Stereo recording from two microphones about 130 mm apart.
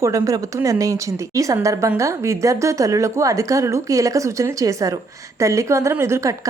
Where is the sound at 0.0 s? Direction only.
25° right (ahead or behind).